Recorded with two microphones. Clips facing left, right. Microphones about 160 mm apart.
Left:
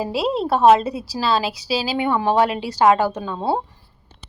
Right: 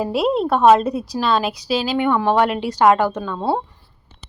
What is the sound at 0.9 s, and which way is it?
Speech, 5° left (ahead or behind).